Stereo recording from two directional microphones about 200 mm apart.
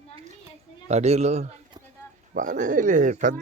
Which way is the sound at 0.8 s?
35° right (ahead or behind).